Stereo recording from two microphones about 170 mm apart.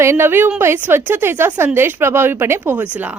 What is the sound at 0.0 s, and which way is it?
A woman's voice, 15° right (ahead or behind).